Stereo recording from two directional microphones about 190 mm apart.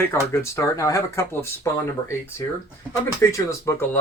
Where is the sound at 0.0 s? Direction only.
15° left (ahead or behind).